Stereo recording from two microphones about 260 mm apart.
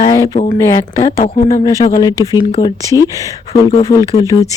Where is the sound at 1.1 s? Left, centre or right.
Left.